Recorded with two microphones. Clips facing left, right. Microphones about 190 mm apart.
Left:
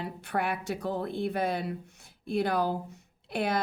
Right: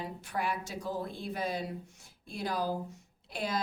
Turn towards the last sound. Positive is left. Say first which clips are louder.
# left 5 dB
turn(degrees=60)  # may be behind; listen again after turning